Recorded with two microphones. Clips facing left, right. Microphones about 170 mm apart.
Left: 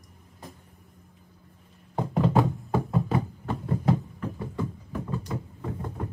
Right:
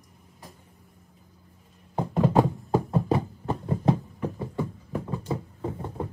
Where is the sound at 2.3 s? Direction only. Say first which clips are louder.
Right 2 dB; 40° right (ahead or behind).